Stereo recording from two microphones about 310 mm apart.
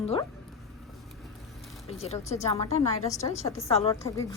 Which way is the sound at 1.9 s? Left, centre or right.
Centre.